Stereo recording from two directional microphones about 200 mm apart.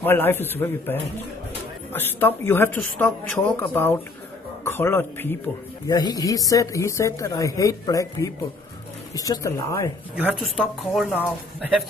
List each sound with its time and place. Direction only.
0.0 s speech: 10° left (ahead or behind)
10.1 s a woman's voice: 5° right (ahead or behind)